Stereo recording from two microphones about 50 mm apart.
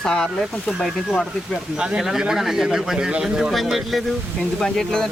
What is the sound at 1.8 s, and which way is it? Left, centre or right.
A man's voice, centre.